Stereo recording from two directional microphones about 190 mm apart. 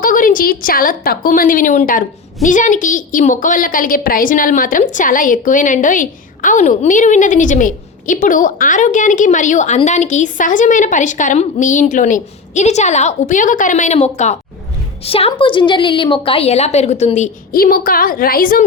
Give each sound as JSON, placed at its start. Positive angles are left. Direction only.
{"t": 0.0, "sound": "a woman's voice", "side_deg": 45}